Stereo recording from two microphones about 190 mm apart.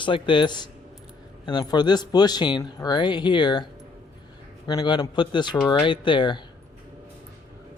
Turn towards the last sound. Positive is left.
turn(degrees=25)  # may be behind; listen again after turning